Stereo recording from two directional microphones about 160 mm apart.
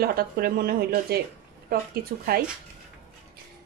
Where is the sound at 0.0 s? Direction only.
70° right (ahead or behind).